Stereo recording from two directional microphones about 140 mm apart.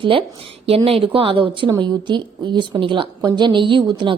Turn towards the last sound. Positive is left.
turn(degrees=-35)  # may be behind; listen again after turning